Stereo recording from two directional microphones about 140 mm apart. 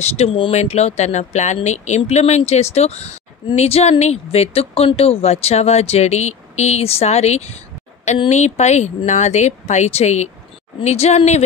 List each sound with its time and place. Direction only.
0.0 s speech: 50° left (ahead or behind)